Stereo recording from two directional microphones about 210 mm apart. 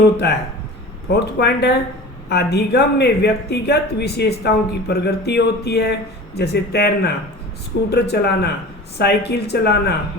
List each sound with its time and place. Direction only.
0.2 s a woman's voice: 55° left (ahead or behind)